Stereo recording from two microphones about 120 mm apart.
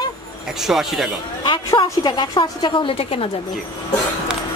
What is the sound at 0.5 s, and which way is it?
Speech, centre (ahead or behind).